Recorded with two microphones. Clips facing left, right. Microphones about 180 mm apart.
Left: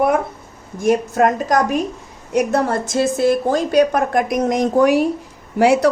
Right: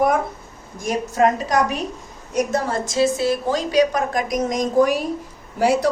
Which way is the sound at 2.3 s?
65° left (ahead or behind).